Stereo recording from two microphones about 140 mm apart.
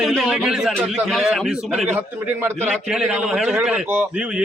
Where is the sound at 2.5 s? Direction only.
5° right (ahead or behind).